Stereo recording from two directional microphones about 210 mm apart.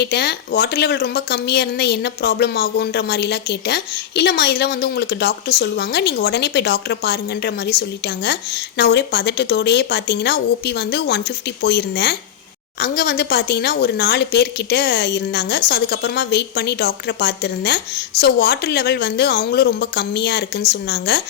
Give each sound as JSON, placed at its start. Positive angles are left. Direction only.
{"t": 0.0, "sound": "a woman's voice", "side_deg": 50}